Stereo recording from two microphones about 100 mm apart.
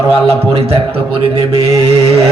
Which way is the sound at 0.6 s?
75° right (ahead or behind).